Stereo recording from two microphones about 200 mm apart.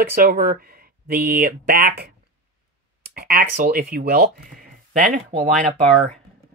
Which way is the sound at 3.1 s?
50° right (ahead or behind).